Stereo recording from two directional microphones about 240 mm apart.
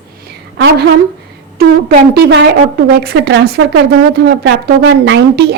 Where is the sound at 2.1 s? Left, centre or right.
Right.